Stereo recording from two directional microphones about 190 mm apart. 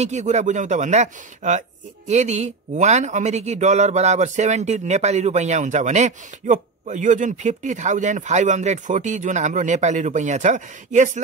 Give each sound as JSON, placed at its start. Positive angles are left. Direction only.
{"t": 0.0, "sound": "speech", "side_deg": -35}